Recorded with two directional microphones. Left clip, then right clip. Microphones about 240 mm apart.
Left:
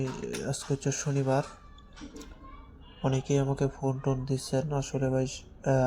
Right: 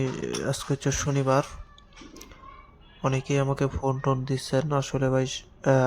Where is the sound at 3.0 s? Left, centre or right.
Centre.